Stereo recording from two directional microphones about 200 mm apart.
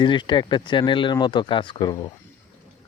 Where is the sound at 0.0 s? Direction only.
25° left (ahead or behind).